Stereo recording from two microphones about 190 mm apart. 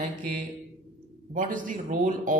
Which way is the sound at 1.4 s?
45° right (ahead or behind).